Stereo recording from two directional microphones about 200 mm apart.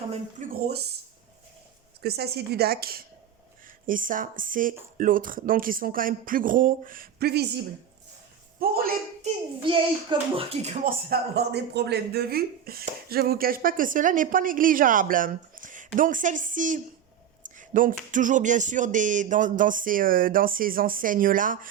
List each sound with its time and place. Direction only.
0.4 s speech: 40° right (ahead or behind)
2.0 s speech: 55° right (ahead or behind)
9.2 s a child's voice: 25° right (ahead or behind)
10.8 s speech: 55° right (ahead or behind)
17.6 s a sound: 40° right (ahead or behind)
18.1 s speech: 40° right (ahead or behind)